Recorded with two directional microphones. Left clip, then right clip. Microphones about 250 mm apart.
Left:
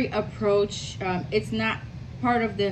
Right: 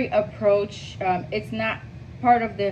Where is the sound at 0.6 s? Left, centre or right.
Left.